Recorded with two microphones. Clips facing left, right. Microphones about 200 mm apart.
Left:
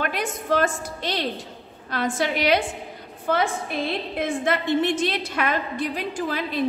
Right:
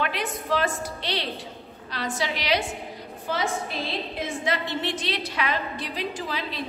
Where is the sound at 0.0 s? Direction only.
45° left (ahead or behind).